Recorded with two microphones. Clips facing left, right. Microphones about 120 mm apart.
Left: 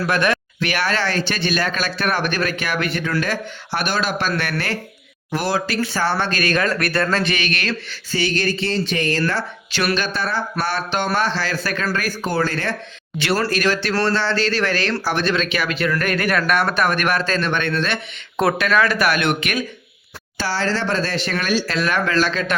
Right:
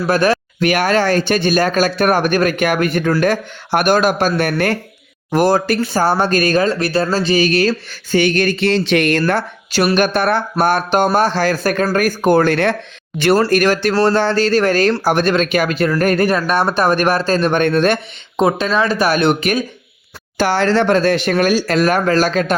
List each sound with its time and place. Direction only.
0.1 s speech: 35° right (ahead or behind)
8.1 s speech: 55° right (ahead or behind)
13.1 s speech: 50° right (ahead or behind)
18.3 s speech: 25° right (ahead or behind)
20.4 s speech: 60° right (ahead or behind)